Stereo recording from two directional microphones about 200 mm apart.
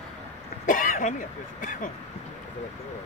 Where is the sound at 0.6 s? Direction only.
40° left (ahead or behind).